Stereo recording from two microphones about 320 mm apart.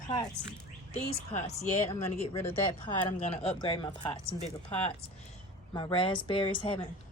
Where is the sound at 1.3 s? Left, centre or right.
Left.